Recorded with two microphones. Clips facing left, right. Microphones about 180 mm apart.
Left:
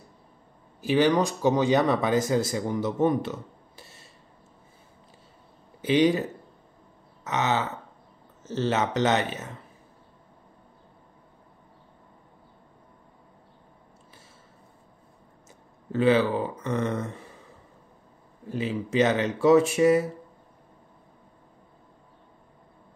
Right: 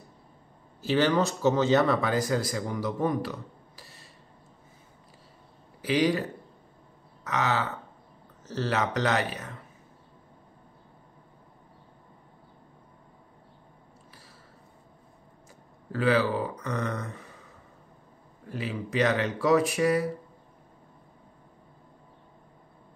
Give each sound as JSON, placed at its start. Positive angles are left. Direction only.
{"t": 0.7, "sound": "speech", "side_deg": 15}
{"t": 5.8, "sound": "a man's voice", "side_deg": 25}
{"t": 7.2, "sound": "speech", "side_deg": 20}
{"t": 15.9, "sound": "speech", "side_deg": 25}
{"t": 18.5, "sound": "speech", "side_deg": 25}